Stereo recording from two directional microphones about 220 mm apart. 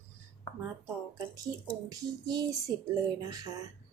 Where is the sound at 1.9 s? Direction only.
15° right (ahead or behind).